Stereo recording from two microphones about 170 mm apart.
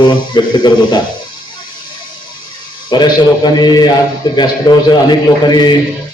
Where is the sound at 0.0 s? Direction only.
25° left (ahead or behind).